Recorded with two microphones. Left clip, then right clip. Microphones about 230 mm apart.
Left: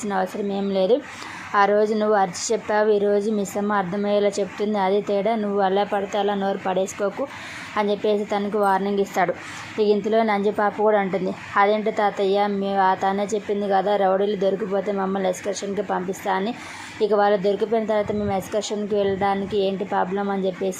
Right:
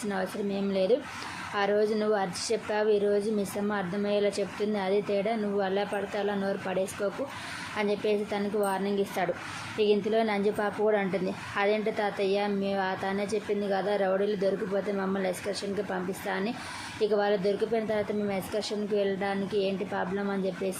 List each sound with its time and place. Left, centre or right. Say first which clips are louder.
0.1 s a woman's voice: left 8 dB; centre